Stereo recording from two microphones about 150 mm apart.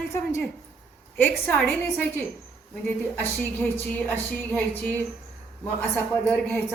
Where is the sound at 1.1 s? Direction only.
10° left (ahead or behind).